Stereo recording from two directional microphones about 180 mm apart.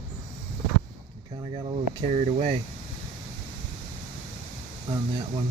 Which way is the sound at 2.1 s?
40° right (ahead or behind).